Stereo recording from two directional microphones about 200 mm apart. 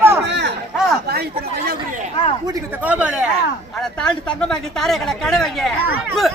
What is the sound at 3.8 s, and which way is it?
Speech, 5° left (ahead or behind).